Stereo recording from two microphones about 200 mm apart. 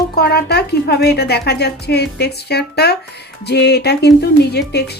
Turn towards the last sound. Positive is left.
turn(degrees=55)  # may be behind; listen again after turning